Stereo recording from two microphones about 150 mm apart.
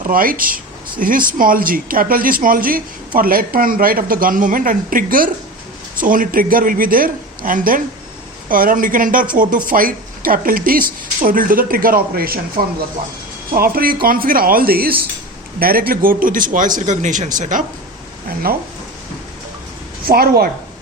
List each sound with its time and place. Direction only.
0.0 s a man's voice: 70° right (ahead or behind)
18.5 s speech: 85° right
20.1 s a woman's voice: 90° right